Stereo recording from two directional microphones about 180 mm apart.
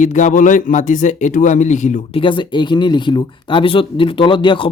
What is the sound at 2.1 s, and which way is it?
Speech, 25° left (ahead or behind).